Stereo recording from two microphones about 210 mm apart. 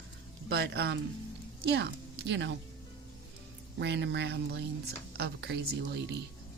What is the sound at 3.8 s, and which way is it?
A woman's voice, 55° right (ahead or behind).